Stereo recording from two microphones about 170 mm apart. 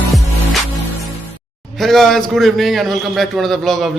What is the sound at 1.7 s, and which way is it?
A man's voice, centre (ahead or behind).